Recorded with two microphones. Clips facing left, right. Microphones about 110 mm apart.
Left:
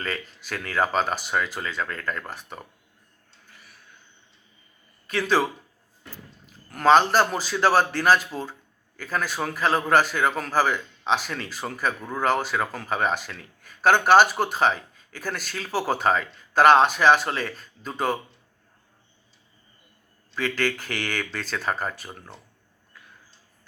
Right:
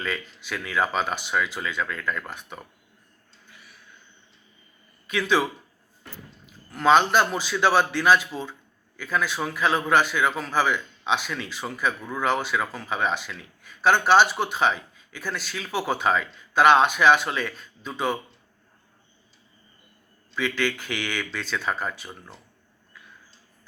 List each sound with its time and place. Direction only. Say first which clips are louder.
0.0 s a man's voice: right 1 dB; 40° left (ahead or behind)
3.5 s a sound: right 1 dB; 40° left (ahead or behind)
5.0 s speech: left 1 dB; 40° left (ahead or behind)
6.7 s a man's voice: left 1 dB; 45° left (ahead or behind)
20.3 s a man's voice: even; 40° left (ahead or behind)